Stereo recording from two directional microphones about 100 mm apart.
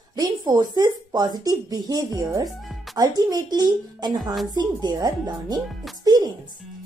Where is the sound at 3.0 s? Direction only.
40° right (ahead or behind).